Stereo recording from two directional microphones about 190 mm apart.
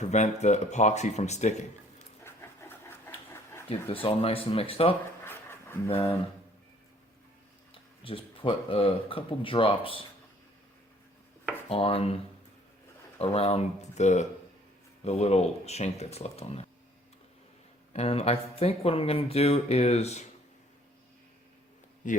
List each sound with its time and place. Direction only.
0.0 s speech: 35° left (ahead or behind)
2.2 s pant: 15° left (ahead or behind)
3.7 s speech: 30° left (ahead or behind)
5.2 s a sound: 10° left (ahead or behind)
7.7 s speech: 30° left (ahead or behind)
11.7 s speech: 30° left (ahead or behind)
17.9 s speech: 30° left (ahead or behind)
22.0 s speech: 40° left (ahead or behind)